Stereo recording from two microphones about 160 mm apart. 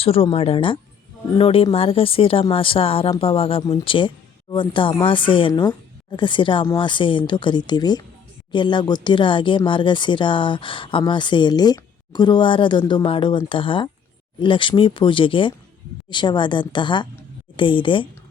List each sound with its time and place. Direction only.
0.0 s speech: 35° left (ahead or behind)